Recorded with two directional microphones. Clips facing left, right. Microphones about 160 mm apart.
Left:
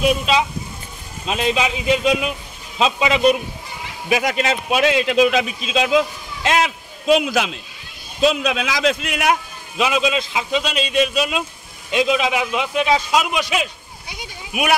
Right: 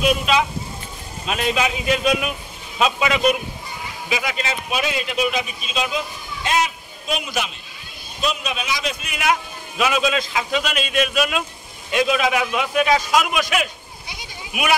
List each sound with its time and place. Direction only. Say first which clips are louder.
1.2 s a man's voice: left 2 dB; 25° left (ahead or behind)
4.1 s speech: left 6 dB; 55° left (ahead or behind); by 9.3 s 80° left
9.8 s a man's voice: left 1 dB; 20° left (ahead or behind)
10.6 s a man's voice: left 3 dB; 25° left (ahead or behind)